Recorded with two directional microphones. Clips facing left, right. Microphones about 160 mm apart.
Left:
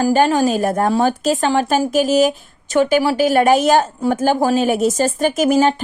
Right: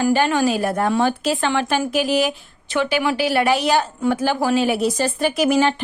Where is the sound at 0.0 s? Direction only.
40° left (ahead or behind).